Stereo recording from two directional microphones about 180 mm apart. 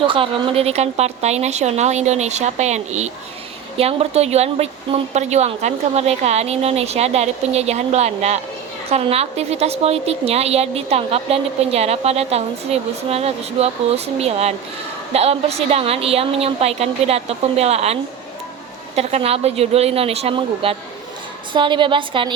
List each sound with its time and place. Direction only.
0.1 s a woman's voice: 30° right (ahead or behind)